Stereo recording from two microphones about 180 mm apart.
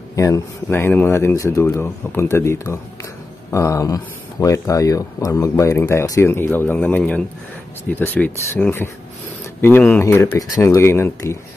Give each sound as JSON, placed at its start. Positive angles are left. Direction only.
{"t": 0.1, "sound": "speech", "side_deg": 15}